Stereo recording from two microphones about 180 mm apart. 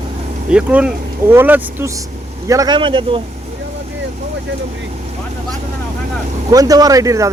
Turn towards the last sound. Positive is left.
turn(degrees=-20)  # may be behind; listen again after turning